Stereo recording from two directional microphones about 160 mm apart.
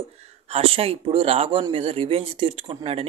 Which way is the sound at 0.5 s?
35° right (ahead or behind).